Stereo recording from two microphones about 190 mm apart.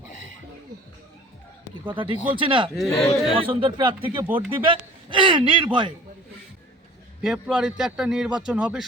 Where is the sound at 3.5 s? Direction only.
25° right (ahead or behind).